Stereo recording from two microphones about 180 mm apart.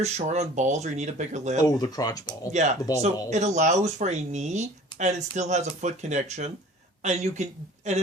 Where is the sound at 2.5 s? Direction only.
40° right (ahead or behind).